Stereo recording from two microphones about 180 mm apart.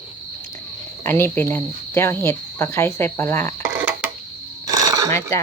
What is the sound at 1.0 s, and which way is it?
Speech, 10° left (ahead or behind).